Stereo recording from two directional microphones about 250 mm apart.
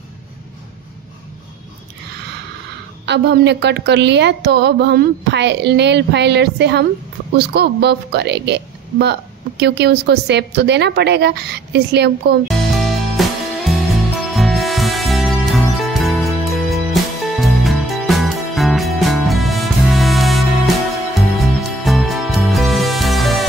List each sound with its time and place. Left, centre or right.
3.1 s a woman's voice: right
12.4 s music: centre